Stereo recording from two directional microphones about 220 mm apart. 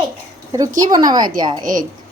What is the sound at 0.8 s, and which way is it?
Speech, 15° right (ahead or behind).